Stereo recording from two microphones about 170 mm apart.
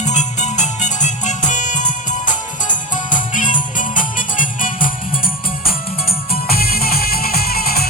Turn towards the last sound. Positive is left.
turn(degrees=60)  # may be behind; listen again after turning